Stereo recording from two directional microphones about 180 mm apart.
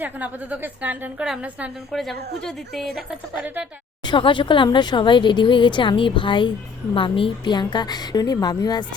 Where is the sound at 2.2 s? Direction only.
65° right (ahead or behind).